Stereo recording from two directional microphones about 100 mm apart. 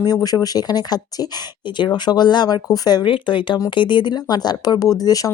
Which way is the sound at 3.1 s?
55° left (ahead or behind).